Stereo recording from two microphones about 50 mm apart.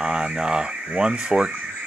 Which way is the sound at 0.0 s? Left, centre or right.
Centre.